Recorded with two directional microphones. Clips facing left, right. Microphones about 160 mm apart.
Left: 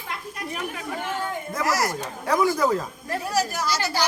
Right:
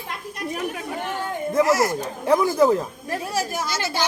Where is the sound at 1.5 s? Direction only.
25° right (ahead or behind).